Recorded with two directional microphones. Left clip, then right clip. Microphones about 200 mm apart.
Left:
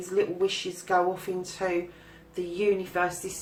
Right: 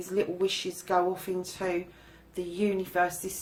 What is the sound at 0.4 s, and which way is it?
Speech, 45° right (ahead or behind).